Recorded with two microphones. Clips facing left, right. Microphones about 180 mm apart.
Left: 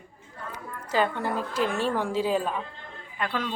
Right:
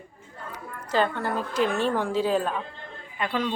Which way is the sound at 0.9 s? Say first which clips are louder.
Right 1 dB; 10° left (ahead or behind).